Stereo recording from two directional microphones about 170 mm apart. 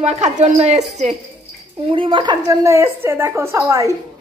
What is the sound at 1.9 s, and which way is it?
A woman's voice, 30° right (ahead or behind).